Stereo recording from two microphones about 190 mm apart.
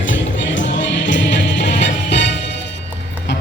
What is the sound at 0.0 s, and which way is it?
Music, 75° left (ahead or behind).